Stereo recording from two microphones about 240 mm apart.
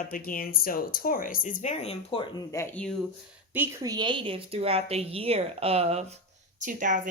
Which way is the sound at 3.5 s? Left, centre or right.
Centre.